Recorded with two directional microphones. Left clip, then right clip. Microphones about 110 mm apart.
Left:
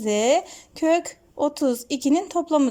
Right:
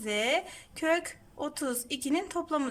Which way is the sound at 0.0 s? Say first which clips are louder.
Left 9 dB; 35° left (ahead or behind).